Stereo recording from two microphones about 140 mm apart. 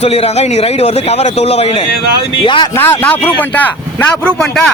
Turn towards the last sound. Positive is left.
turn(degrees=5)  # may be behind; listen again after turning